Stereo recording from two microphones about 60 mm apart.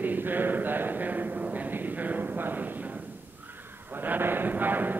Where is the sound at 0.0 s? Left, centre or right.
Right.